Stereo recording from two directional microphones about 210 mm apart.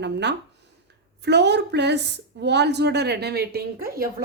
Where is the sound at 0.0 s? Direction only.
55° right (ahead or behind).